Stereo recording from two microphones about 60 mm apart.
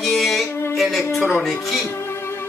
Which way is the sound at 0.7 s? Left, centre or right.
Centre.